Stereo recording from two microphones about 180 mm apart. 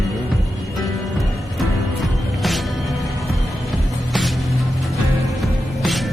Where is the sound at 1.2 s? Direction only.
Centre (ahead or behind).